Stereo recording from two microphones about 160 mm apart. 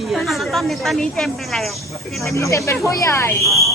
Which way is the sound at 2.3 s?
20° left (ahead or behind).